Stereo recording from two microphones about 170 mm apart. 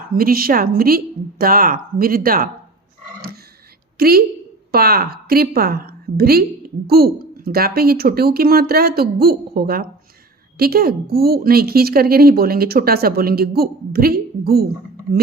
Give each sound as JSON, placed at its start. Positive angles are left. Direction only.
{"t": 0.2, "sound": "speech", "side_deg": -60}
{"t": 3.9, "sound": "a woman's voice", "side_deg": -65}